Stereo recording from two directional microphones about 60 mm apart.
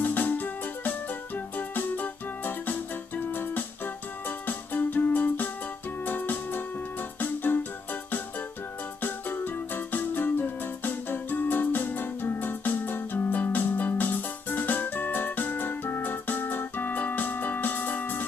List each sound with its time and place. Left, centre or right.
0.0 s music: left